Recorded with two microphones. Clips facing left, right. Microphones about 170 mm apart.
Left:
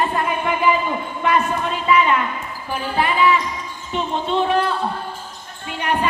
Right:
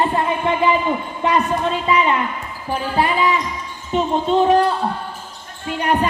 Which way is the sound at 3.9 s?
40° right (ahead or behind).